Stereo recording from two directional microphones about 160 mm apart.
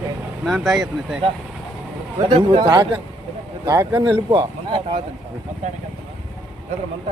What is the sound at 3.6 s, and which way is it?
Speech, 15° right (ahead or behind).